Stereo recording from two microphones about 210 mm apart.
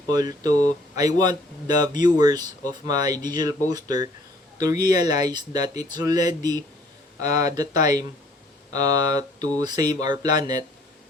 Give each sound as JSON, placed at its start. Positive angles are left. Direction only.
{"t": 0.1, "sound": "speech", "side_deg": -15}